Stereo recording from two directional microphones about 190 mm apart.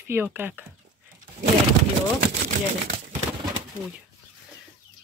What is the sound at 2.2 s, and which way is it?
Speech, 50° right (ahead or behind).